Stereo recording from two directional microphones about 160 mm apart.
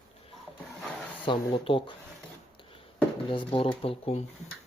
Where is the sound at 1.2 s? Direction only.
30° left (ahead or behind).